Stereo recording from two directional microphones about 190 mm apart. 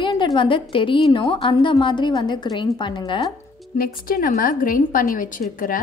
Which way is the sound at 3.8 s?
50° left (ahead or behind).